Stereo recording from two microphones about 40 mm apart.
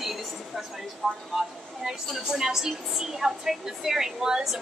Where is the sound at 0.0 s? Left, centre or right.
Centre.